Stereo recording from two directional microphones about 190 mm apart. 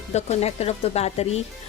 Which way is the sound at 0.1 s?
35° left (ahead or behind).